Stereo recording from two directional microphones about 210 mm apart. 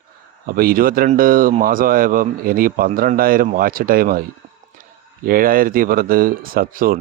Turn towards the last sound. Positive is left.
turn(degrees=-45)  # may be behind; listen again after turning